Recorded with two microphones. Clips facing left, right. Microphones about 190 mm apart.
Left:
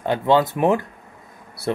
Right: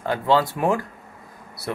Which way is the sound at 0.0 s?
20° left (ahead or behind).